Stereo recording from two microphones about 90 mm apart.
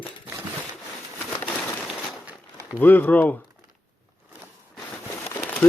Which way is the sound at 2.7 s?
20° left (ahead or behind).